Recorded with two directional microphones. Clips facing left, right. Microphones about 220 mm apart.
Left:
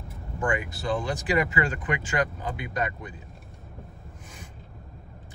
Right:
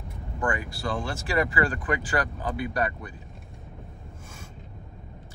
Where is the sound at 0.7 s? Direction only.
20° left (ahead or behind).